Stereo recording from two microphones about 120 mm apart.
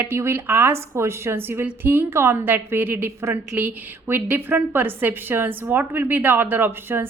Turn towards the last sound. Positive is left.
turn(degrees=-15)  # may be behind; listen again after turning